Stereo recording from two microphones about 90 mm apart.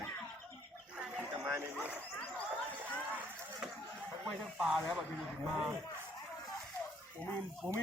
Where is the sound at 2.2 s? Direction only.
15° left (ahead or behind).